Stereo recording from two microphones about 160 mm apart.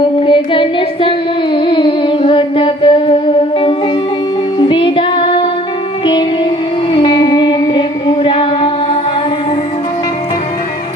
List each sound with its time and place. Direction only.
0.0 s music: 30° left (ahead or behind)
4.7 s child singing: 30° left (ahead or behind)
6.1 s music: 30° left (ahead or behind)